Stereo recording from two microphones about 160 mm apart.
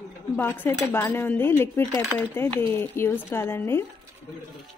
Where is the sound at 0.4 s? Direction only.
15° left (ahead or behind).